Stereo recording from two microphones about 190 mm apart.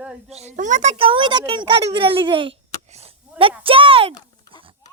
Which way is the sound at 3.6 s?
30° right (ahead or behind).